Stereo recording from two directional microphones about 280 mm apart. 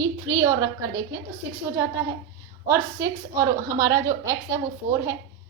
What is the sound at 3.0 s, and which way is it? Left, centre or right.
A woman's voice, centre.